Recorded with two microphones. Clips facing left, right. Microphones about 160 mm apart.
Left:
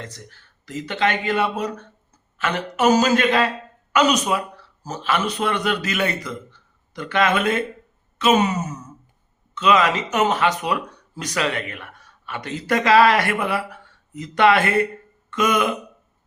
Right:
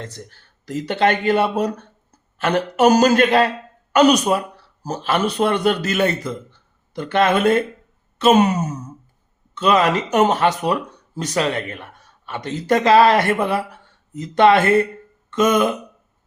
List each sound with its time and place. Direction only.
0.8 s a man's voice: 40° right (ahead or behind)